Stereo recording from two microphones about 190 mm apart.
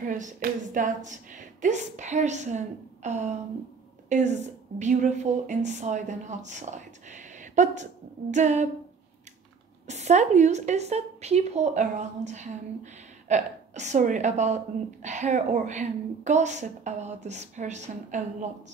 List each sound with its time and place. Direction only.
0.0 s a woman's voice: 45° right (ahead or behind)
9.8 s a woman's voice: 35° right (ahead or behind)